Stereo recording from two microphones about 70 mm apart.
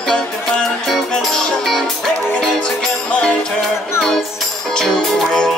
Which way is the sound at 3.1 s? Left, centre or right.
Centre.